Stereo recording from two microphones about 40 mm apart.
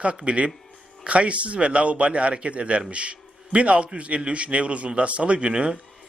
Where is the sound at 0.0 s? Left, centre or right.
Right.